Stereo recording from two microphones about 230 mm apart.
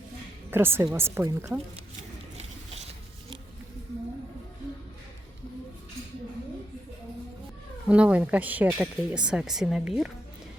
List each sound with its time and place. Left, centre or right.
0.5 s a woman's voice: centre
2.4 s biting: right
7.9 s a woman's voice: centre